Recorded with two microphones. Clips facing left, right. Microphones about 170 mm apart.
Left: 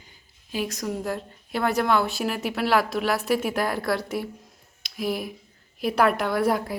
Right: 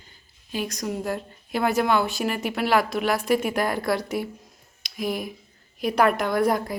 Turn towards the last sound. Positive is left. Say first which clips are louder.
# right 1 dB
turn(degrees=5)  # may be behind; listen again after turning